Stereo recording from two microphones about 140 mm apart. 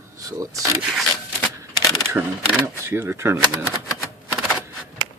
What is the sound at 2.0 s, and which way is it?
Speech, 20° right (ahead or behind).